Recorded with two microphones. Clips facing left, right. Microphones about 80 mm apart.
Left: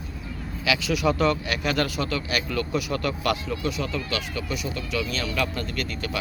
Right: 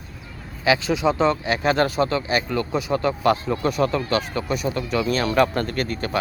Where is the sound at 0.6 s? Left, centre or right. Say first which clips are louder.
Right 4 dB; right.